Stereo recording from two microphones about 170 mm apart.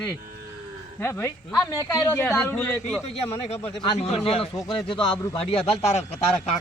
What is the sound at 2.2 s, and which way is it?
Speech, 5° left (ahead or behind).